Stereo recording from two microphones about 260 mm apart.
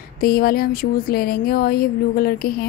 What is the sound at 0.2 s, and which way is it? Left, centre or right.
Speech, left.